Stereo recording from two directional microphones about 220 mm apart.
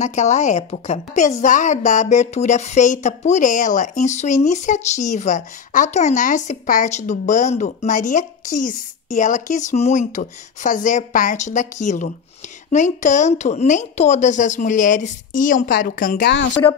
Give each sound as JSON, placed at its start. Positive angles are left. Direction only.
{"t": 0.0, "sound": "speech", "side_deg": 30}